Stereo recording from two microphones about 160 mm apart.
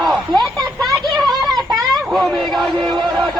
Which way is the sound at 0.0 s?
Centre (ahead or behind).